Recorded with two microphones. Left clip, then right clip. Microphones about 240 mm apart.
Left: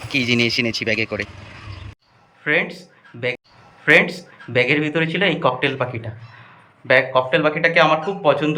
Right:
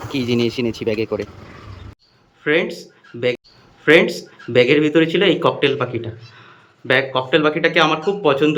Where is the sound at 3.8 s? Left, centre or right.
Centre.